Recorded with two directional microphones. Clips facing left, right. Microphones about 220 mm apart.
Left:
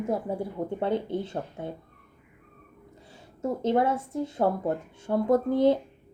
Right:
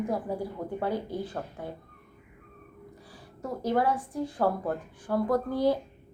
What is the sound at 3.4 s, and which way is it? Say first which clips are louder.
A woman's voice: left 3 dB; 25° left (ahead or behind).